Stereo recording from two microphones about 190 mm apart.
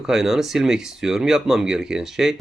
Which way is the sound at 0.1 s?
Centre (ahead or behind).